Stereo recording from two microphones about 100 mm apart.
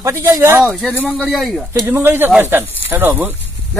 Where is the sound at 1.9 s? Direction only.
25° right (ahead or behind).